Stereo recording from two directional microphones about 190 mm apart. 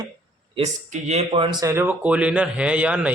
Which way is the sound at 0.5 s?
35° right (ahead or behind).